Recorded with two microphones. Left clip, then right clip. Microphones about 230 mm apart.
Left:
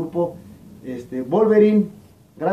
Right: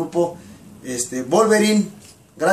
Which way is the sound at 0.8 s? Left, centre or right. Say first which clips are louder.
Right 3 dB; right.